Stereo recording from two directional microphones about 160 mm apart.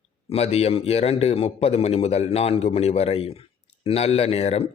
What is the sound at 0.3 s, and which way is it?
A man's voice, 40° left (ahead or behind).